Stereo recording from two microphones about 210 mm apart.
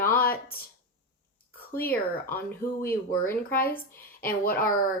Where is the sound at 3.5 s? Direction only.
45° left (ahead or behind).